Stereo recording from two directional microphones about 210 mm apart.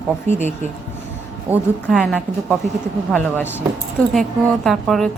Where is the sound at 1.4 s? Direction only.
5° right (ahead or behind).